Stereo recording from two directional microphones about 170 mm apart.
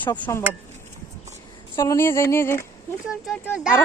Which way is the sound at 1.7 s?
15° left (ahead or behind).